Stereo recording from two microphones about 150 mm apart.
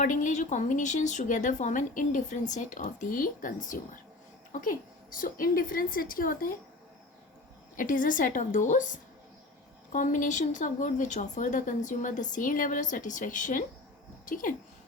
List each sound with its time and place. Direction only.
0.0 s a woman's voice: 55° left (ahead or behind)
5.1 s a woman's voice: 70° left (ahead or behind)
7.8 s a woman's voice: 65° left (ahead or behind)
9.9 s a woman's voice: 60° left (ahead or behind)